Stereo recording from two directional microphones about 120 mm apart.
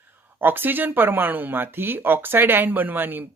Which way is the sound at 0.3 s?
15° right (ahead or behind).